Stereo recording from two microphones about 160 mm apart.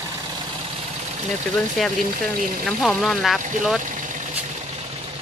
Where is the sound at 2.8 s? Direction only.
Centre (ahead or behind).